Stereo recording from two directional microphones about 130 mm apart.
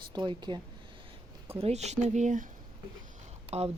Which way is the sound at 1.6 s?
60° right (ahead or behind).